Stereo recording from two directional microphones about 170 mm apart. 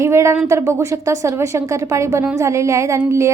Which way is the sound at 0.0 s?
15° right (ahead or behind).